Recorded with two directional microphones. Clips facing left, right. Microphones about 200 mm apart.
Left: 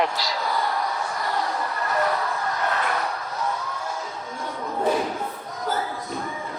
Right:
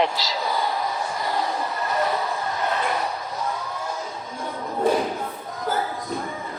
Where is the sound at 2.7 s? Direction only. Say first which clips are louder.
Right 1 dB; 20° right (ahead or behind).